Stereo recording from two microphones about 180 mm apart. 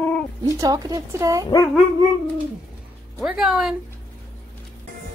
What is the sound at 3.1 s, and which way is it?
Speech, centre (ahead or behind).